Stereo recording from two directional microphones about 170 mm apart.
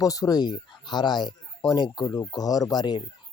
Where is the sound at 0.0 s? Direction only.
20° left (ahead or behind).